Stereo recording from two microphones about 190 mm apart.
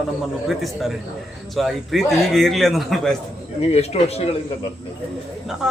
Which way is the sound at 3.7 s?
35° left (ahead or behind).